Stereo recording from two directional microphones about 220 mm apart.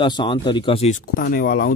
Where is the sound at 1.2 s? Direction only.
40° left (ahead or behind).